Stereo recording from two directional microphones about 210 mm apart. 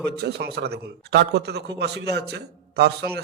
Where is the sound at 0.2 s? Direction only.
50° right (ahead or behind).